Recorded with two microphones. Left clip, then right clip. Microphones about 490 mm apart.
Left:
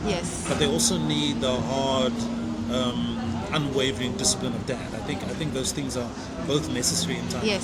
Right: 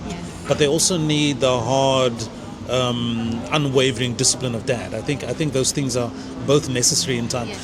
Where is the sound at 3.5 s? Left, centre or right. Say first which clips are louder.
Right 7 dB; right.